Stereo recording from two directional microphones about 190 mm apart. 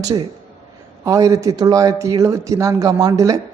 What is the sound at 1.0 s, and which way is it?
Speech, 15° right (ahead or behind).